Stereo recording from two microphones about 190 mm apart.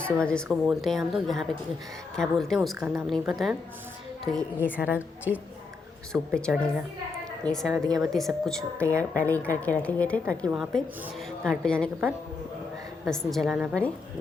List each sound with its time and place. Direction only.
0.0 s a woman's voice: 5° left (ahead or behind)
4.9 s a woman's voice: 10° right (ahead or behind)
6.1 s a woman's voice: 5° left (ahead or behind)
13.1 s a woman's voice: centre (ahead or behind)